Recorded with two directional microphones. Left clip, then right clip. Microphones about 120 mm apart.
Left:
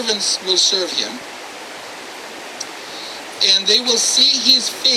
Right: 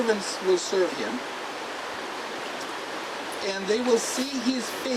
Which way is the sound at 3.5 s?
35° left (ahead or behind).